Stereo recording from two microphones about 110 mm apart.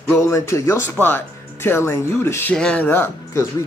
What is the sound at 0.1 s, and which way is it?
Speech, 25° left (ahead or behind).